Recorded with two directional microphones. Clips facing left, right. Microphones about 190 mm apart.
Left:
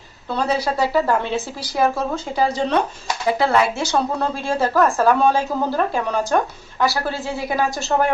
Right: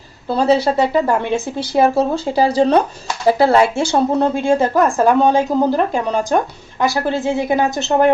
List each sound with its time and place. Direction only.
0.3 s speech: 30° right (ahead or behind); by 1.5 s 15° right (ahead or behind)
1.5 s speech: 25° right (ahead or behind)